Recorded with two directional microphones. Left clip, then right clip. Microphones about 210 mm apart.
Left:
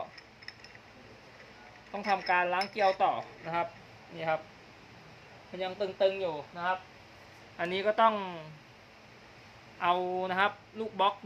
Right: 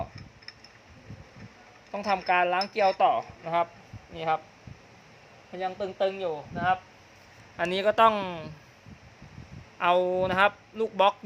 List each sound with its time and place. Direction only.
1.9 s speech: 45° right (ahead or behind)
5.5 s a man's voice: 35° right (ahead or behind); by 8.4 s 55° right (ahead or behind)
9.8 s speech: 50° right (ahead or behind)